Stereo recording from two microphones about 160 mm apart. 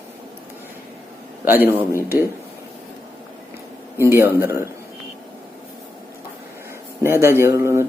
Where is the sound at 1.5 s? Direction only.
10° right (ahead or behind).